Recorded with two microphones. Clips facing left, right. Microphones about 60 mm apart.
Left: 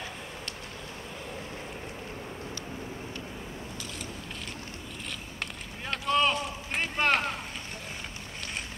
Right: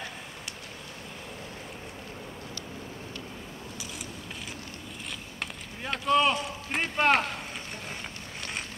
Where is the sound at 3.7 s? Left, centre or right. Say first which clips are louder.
Left 1 dB; centre.